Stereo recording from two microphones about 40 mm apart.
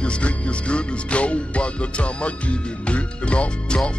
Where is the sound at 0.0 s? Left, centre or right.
Left.